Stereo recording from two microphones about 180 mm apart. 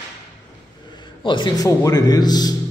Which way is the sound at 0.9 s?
25° left (ahead or behind).